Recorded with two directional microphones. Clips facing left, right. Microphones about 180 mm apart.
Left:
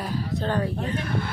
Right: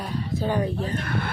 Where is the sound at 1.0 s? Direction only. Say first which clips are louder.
Even; 65° right (ahead or behind).